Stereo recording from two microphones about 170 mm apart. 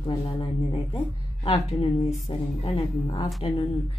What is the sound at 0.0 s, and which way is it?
Speech, 30° left (ahead or behind).